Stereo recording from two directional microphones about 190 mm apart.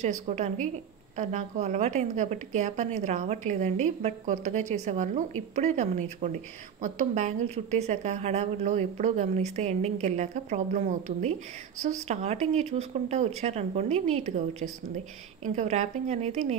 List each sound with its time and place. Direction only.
0.0 s speech: 35° right (ahead or behind)